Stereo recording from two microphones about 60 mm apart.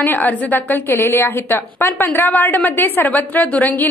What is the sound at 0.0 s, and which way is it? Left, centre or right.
A woman's voice, left.